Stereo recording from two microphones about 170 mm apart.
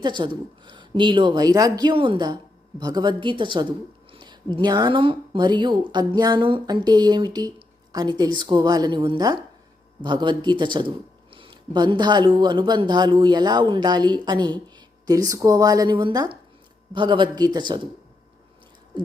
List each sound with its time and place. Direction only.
0.0 s a woman's voice: 25° right (ahead or behind)